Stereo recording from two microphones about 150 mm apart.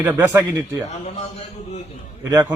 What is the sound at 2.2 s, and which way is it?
Speech, 20° right (ahead or behind).